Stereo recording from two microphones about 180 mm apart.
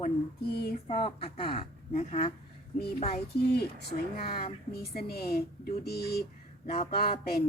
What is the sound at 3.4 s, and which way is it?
Speech, 65° left (ahead or behind).